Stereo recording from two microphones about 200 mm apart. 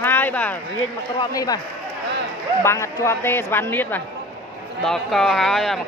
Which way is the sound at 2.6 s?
15° left (ahead or behind).